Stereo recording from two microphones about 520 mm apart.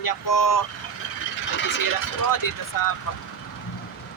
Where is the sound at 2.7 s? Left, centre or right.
Left.